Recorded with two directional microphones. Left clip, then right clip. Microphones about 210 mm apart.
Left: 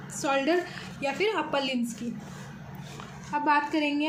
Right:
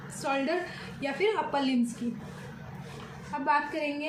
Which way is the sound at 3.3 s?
45° left (ahead or behind).